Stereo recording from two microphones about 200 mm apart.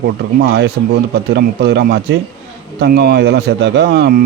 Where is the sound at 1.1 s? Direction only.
55° right (ahead or behind).